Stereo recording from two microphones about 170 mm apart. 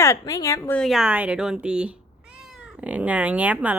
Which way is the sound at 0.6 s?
5° left (ahead or behind).